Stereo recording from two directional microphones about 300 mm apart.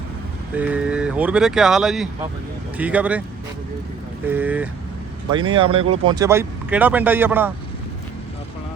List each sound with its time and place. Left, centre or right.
0.5 s speech: centre
4.3 s speech: centre
5.3 s speech: centre